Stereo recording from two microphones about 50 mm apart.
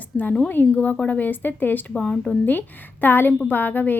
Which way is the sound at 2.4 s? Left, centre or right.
Left.